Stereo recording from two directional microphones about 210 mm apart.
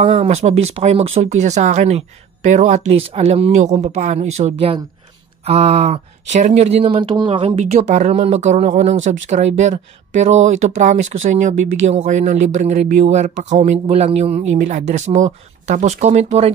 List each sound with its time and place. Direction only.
0.0 s speech: 30° right (ahead or behind)